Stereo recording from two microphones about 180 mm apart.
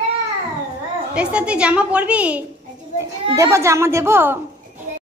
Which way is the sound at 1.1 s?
5° right (ahead or behind).